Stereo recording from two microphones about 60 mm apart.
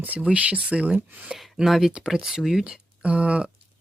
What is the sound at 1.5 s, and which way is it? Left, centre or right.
Speech, centre.